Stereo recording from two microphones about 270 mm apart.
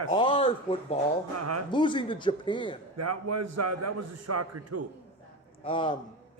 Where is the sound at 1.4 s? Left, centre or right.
Right.